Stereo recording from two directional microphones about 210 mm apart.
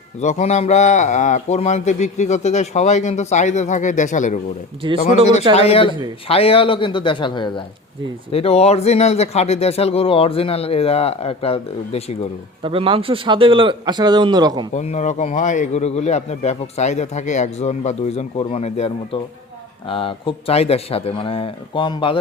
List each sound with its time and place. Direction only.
0.2 s a man's voice: 35° left (ahead or behind)
4.8 s a man's voice: 25° right (ahead or behind)
5.5 s speech: 30° left (ahead or behind)
12.6 s a man's voice: 25° right (ahead or behind)
14.7 s a man's voice: 35° left (ahead or behind)